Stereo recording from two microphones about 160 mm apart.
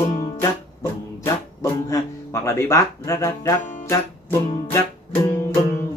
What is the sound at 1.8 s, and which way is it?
Speech, 20° left (ahead or behind).